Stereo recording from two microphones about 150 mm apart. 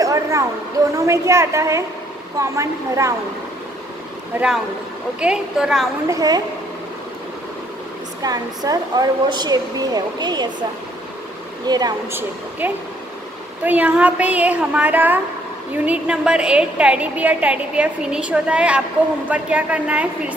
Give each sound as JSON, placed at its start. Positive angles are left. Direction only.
{"t": 0.0, "sound": "speech", "side_deg": -20}
{"t": 4.3, "sound": "a woman's voice", "side_deg": -10}
{"t": 6.0, "sound": "speech", "side_deg": -25}
{"t": 8.2, "sound": "speech", "side_deg": -25}
{"t": 11.6, "sound": "speech", "side_deg": -25}
{"t": 12.1, "sound": "a woman's voice", "side_deg": -15}